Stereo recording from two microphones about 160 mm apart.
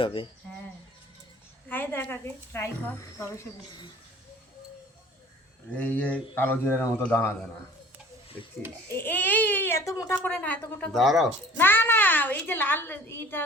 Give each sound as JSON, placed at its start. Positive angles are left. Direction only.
{"t": 0.0, "sound": "speech", "side_deg": 30}
{"t": 1.7, "sound": "speech", "side_deg": 10}
{"t": 5.7, "sound": "speech", "side_deg": 10}
{"t": 8.9, "sound": "speech", "side_deg": 15}
{"t": 11.5, "sound": "speech", "side_deg": 15}